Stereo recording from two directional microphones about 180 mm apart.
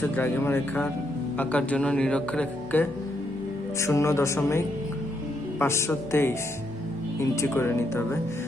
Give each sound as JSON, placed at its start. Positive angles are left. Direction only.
{"t": 0.0, "sound": "speech", "side_deg": 10}